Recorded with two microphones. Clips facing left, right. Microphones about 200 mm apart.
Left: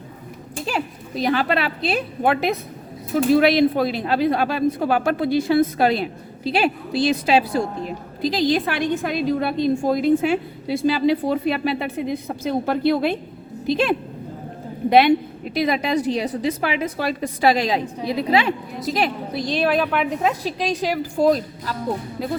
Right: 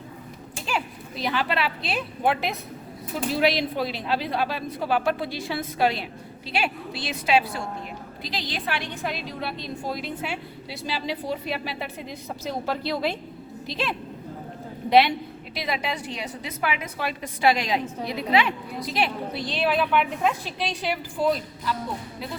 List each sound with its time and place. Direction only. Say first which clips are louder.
0.6 s a woman's voice: left 4 dB; 45° left (ahead or behind)